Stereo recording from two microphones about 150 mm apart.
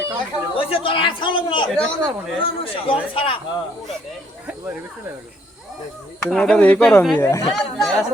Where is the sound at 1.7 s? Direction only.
5° left (ahead or behind).